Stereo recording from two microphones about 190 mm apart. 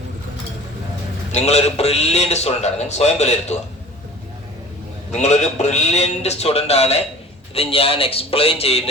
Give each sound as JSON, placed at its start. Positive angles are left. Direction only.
{"t": 1.3, "sound": "a man's voice", "side_deg": 35}
{"t": 5.1, "sound": "a man's voice", "side_deg": 35}